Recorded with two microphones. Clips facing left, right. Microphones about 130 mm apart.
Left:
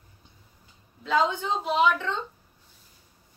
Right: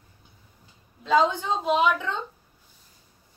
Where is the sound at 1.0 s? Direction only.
15° right (ahead or behind).